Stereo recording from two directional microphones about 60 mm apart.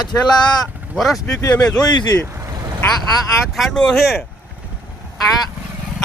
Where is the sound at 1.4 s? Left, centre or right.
Left.